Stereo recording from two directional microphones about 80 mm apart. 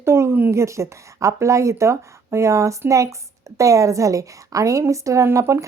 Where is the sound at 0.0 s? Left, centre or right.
Right.